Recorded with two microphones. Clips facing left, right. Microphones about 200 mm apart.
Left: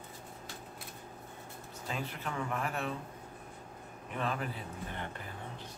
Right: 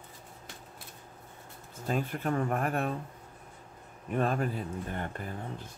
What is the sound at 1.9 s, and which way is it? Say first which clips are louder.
Speech: right 8 dB; 50° right (ahead or behind).